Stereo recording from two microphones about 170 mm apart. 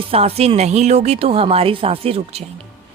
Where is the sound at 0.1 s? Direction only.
35° right (ahead or behind).